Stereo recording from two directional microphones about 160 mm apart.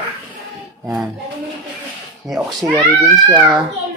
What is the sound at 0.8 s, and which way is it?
Speech, 5° right (ahead or behind).